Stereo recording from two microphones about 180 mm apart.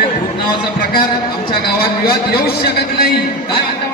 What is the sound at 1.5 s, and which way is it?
Speech, 60° left (ahead or behind).